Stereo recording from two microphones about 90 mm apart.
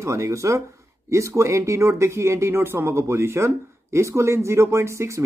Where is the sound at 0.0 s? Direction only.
35° right (ahead or behind).